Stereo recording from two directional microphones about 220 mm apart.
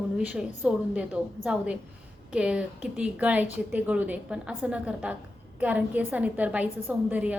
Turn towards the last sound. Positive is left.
turn(degrees=-5)  # may be behind; listen again after turning